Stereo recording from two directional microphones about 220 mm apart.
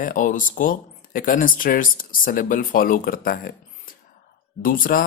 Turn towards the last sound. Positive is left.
turn(degrees=40)  # may be behind; listen again after turning